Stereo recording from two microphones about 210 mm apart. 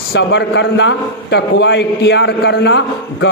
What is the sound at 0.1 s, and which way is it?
A man's voice, 55° left (ahead or behind).